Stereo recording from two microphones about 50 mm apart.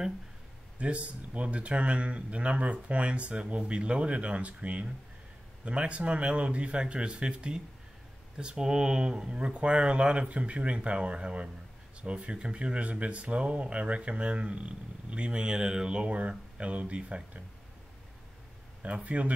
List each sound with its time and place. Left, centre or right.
0.7 s speech: right
18.8 s speech: right